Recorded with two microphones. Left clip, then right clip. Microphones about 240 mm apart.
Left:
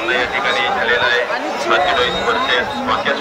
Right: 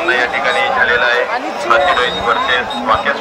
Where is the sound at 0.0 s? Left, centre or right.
Right.